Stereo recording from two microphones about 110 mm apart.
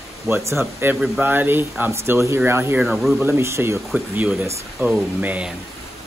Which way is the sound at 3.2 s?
25° right (ahead or behind).